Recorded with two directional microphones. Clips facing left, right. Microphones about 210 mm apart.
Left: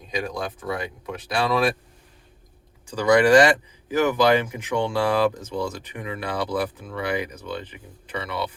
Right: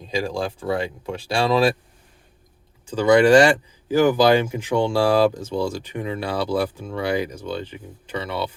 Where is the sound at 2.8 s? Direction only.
25° right (ahead or behind).